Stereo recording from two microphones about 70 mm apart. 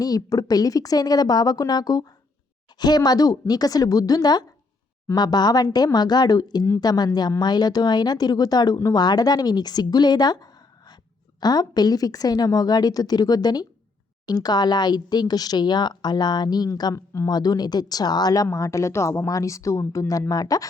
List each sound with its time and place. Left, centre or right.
0.0 s a woman's voice: left
2.7 s a woman's voice: left
5.1 s speech: left
5.6 s a woman's voice: left
17.2 s a woman's voice: left
18.5 s a woman's voice: left